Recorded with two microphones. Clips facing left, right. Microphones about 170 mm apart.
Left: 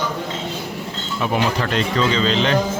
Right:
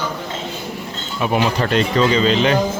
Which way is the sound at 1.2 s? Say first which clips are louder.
Right 2 dB; 15° right (ahead or behind).